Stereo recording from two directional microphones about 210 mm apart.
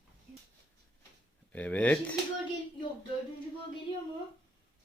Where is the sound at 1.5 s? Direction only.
5° left (ahead or behind).